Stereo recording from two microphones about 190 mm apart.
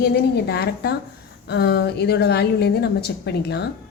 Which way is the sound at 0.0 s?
60° left (ahead or behind).